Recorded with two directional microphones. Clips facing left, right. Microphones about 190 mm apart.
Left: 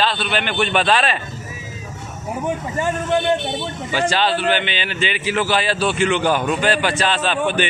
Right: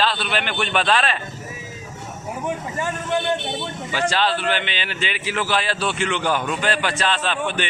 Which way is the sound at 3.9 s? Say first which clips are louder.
Left 3 dB; centre (ahead or behind).